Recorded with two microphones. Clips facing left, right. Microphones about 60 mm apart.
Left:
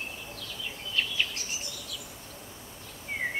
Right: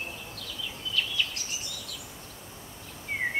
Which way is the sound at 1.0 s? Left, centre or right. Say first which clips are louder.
Even; left.